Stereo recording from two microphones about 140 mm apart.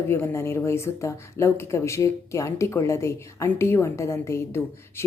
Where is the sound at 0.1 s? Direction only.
20° left (ahead or behind).